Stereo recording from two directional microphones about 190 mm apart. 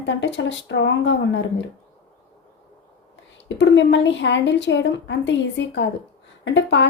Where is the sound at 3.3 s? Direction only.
70° left (ahead or behind).